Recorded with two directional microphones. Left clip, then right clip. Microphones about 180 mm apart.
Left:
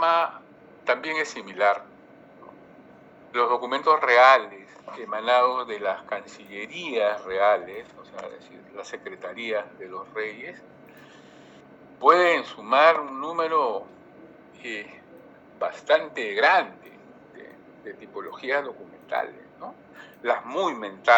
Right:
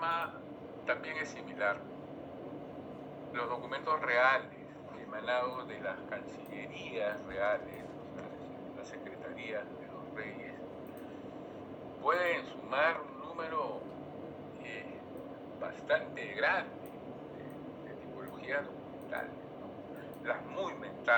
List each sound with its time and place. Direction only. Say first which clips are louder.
0.0 s a sound: left 14 dB; 60° left (ahead or behind)
0.9 s a man's voice: left 11 dB; 60° left (ahead or behind)
3.3 s speech: left 14 dB; 60° left (ahead or behind)
9.0 s speech: left 12 dB; 60° left (ahead or behind)
12.0 s a man's voice: left 14 dB; 60° left (ahead or behind)
18.4 s speech: left 11 dB; 60° left (ahead or behind)
20.2 s speech: left 13 dB; 60° left (ahead or behind)